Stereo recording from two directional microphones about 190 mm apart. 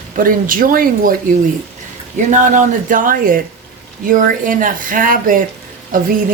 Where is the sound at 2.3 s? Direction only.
45° right (ahead or behind).